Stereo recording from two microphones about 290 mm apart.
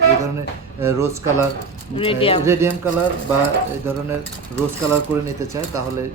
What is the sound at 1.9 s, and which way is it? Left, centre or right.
Speech, centre.